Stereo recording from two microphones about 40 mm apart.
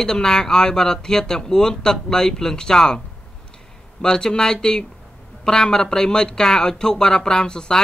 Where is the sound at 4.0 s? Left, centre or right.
Centre.